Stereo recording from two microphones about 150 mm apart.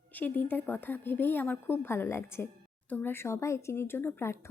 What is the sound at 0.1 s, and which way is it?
A woman's voice, 10° left (ahead or behind).